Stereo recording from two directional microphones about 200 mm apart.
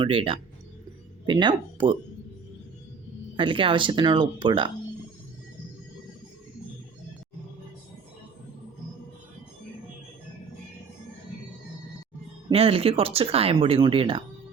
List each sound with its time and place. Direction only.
0.0 s speech: 25° right (ahead or behind)
3.3 s speech: 25° right (ahead or behind)
12.5 s speech: 30° right (ahead or behind)